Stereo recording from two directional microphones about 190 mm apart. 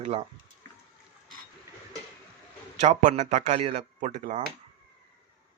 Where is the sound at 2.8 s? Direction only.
40° right (ahead or behind).